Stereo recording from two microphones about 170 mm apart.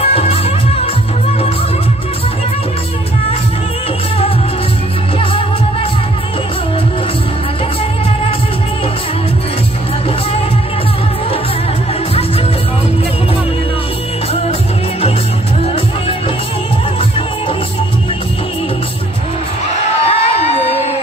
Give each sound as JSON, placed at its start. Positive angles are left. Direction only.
{"t": 0.0, "sound": "music", "side_deg": 35}
{"t": 5.2, "sound": "music", "side_deg": 30}
{"t": 20.1, "sound": "a sound", "side_deg": 35}